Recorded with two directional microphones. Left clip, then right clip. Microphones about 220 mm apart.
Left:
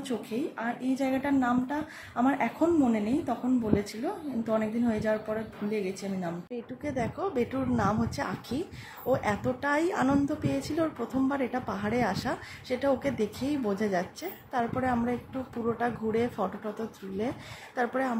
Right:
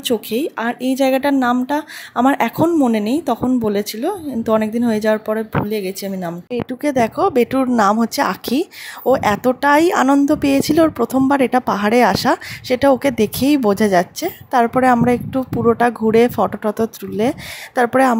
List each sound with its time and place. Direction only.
0.0 s speech: 40° right (ahead or behind)